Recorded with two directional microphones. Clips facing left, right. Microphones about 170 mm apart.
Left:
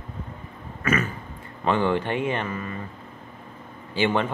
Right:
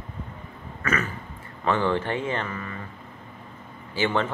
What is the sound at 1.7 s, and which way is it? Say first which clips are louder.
Speech: left 1 dB; 15° left (ahead or behind).